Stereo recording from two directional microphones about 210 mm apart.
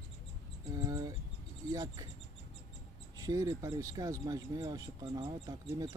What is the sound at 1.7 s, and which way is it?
Speech, 15° right (ahead or behind).